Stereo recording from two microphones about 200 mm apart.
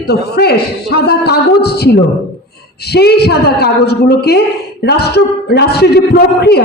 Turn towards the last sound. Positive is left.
turn(degrees=55)  # may be behind; listen again after turning